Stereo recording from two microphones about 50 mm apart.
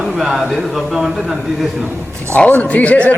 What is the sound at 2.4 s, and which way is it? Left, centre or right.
Speech, left.